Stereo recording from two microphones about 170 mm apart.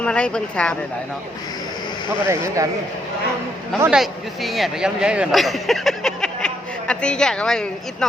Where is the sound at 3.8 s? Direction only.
5° right (ahead or behind).